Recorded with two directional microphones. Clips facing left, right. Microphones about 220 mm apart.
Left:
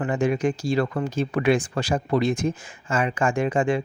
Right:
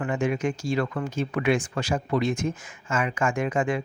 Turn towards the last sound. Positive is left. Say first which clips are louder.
# left 3 dB
turn(degrees=30)  # may be behind; listen again after turning